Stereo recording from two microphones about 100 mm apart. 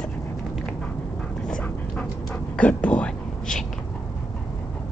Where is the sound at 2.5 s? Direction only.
15° left (ahead or behind).